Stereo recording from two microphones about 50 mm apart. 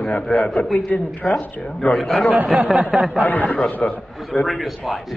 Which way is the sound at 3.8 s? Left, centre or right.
Left.